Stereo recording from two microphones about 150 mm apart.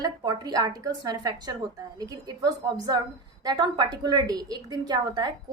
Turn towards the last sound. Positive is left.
turn(degrees=-25)  # may be behind; listen again after turning